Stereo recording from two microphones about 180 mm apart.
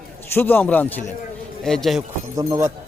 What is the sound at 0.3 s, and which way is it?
A man's voice, 10° left (ahead or behind).